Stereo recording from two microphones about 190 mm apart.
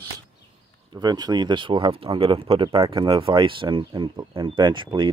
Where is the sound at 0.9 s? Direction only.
20° right (ahead or behind).